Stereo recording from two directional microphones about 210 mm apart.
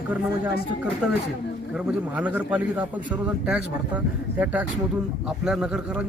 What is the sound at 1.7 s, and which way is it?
A man's voice, 5° right (ahead or behind).